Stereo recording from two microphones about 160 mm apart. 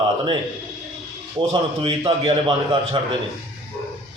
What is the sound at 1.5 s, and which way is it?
A man's voice, 30° right (ahead or behind).